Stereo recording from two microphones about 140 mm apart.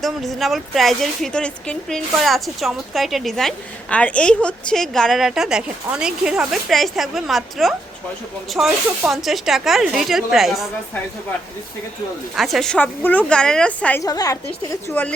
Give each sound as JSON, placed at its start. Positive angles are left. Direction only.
{"t": 0.0, "sound": "a woman's voice", "side_deg": 0}
{"t": 12.4, "sound": "a woman's voice", "side_deg": 0}
{"t": 14.0, "sound": "a woman's voice", "side_deg": 25}